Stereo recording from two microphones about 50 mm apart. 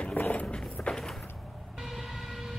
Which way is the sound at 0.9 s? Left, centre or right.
Centre.